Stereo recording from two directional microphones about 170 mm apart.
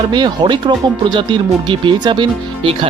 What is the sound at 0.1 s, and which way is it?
Speech, 25° right (ahead or behind).